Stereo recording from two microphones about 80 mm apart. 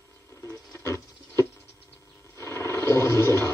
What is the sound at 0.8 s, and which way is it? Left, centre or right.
Patter, left.